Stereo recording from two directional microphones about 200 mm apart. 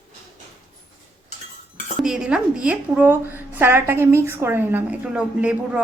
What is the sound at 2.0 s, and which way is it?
A woman's voice, 5° right (ahead or behind).